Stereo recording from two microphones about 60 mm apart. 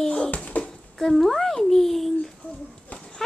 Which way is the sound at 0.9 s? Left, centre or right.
Centre.